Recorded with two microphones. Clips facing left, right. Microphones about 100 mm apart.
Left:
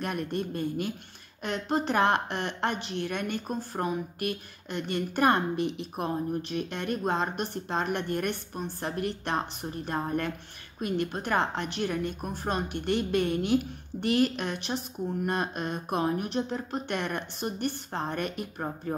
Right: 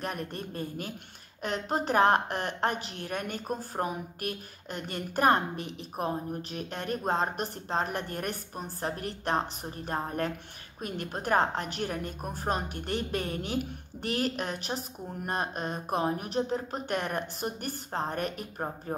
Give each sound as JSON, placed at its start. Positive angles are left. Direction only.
{"t": 0.0, "sound": "a woman's voice", "side_deg": -40}